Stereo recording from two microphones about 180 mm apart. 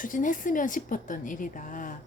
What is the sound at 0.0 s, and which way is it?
Speech, 45° left (ahead or behind).